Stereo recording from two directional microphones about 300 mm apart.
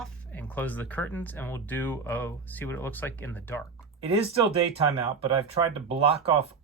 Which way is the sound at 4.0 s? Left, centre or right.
Centre.